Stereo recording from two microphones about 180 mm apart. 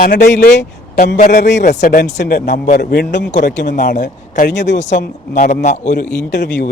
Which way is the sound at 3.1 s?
45° left (ahead or behind).